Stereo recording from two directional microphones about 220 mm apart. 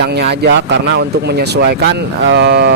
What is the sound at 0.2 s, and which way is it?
Speech, 50° right (ahead or behind).